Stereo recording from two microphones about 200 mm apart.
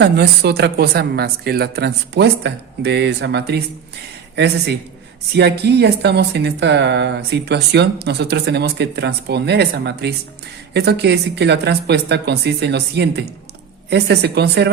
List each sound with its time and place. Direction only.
0.0 s a woman's voice: 55° right (ahead or behind)